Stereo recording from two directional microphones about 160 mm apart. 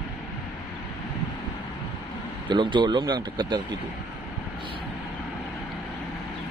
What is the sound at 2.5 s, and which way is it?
Speech, 30° right (ahead or behind).